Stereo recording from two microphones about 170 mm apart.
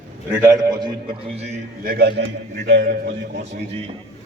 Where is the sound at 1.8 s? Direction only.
75° right (ahead or behind); by 3.1 s 55° right (ahead or behind).